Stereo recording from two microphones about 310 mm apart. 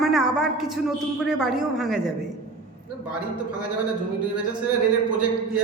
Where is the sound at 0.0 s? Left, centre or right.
Centre.